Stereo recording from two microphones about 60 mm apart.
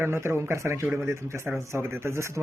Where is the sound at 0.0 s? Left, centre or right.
Right.